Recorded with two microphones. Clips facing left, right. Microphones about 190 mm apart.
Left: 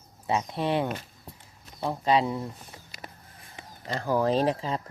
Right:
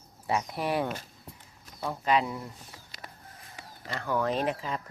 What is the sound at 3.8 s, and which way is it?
Speech, 30° left (ahead or behind).